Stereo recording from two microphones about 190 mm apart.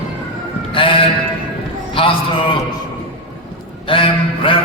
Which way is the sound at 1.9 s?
25° left (ahead or behind).